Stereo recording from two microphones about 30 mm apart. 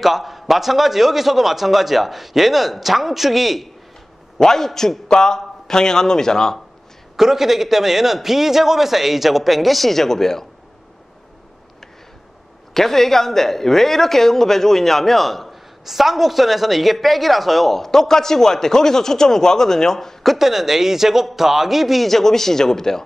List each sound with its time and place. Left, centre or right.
0.0 s a man's voice: centre
4.4 s a woman's voice: centre
7.2 s a man's voice: centre
12.7 s a woman's voice: centre
15.8 s a woman's voice: centre
20.2 s a man's voice: centre
22.0 s a woman's voice: centre